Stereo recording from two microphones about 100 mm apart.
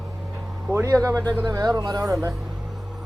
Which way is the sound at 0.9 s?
35° right (ahead or behind).